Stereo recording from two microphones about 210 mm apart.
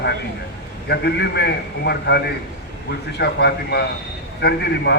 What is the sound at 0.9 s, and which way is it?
A man's voice, 50° left (ahead or behind).